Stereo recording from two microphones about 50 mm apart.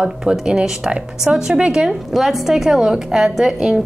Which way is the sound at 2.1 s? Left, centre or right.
Centre.